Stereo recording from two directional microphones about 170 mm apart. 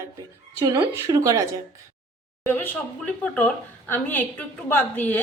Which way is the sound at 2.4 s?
10° left (ahead or behind).